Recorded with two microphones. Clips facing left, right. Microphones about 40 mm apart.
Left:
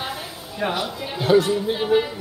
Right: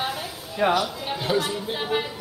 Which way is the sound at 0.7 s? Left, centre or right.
Left.